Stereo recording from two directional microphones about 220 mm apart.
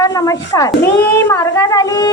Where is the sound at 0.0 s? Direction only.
15° left (ahead or behind).